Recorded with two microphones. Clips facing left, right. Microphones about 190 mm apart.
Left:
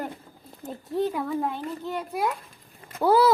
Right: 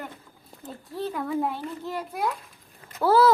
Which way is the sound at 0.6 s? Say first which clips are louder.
Left 5 dB; 20° left (ahead or behind).